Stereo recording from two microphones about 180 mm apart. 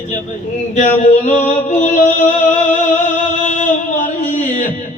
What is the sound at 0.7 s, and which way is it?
Music, 45° left (ahead or behind).